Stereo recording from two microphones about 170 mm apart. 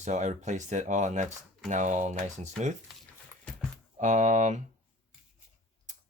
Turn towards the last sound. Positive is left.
turn(degrees=-45)  # may be behind; listen again after turning